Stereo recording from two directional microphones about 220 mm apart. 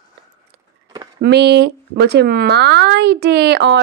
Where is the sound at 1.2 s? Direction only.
50° right (ahead or behind).